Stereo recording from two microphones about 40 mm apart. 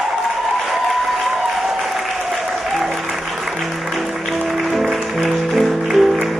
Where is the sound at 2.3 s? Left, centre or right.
Centre.